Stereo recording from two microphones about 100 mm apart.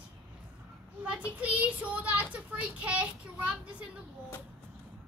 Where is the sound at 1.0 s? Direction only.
10° right (ahead or behind).